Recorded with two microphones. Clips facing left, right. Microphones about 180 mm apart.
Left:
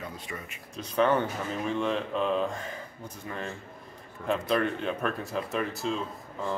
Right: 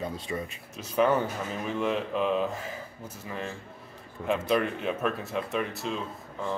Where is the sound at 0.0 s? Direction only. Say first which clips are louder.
Right 6 dB; 30° right (ahead or behind).